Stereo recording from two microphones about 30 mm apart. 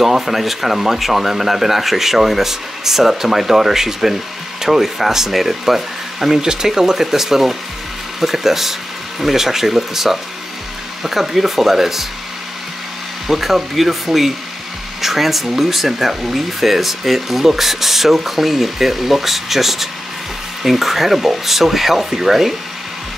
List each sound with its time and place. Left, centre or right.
0.0 s speech: centre
6.4 s speech: right
13.3 s speech: centre